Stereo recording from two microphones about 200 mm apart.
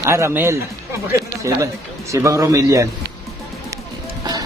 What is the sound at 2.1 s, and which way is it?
Speech, 15° right (ahead or behind).